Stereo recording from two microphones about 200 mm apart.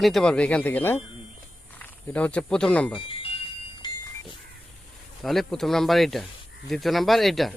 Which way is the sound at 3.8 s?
20° left (ahead or behind).